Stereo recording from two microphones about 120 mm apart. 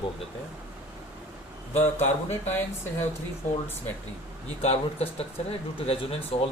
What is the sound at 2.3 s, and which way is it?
Speech, 15° left (ahead or behind).